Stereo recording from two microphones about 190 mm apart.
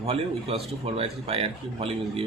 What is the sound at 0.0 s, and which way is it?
Speech, 30° right (ahead or behind).